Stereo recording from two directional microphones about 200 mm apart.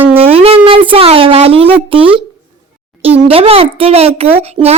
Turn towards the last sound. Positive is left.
turn(degrees=-30)  # may be behind; listen again after turning